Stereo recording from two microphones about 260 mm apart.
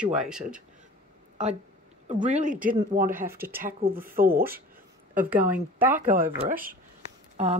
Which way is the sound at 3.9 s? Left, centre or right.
Right.